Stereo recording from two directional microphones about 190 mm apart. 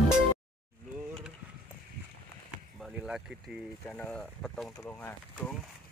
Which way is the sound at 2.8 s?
Centre (ahead or behind).